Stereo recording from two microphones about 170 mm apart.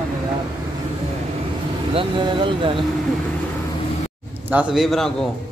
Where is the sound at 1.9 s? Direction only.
30° right (ahead or behind).